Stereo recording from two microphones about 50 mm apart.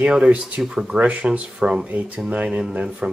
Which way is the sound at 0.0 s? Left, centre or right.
Right.